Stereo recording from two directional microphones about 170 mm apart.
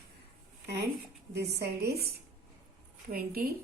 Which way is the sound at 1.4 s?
70° right (ahead or behind).